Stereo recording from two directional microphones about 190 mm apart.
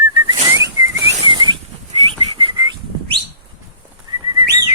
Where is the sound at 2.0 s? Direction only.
25° right (ahead or behind).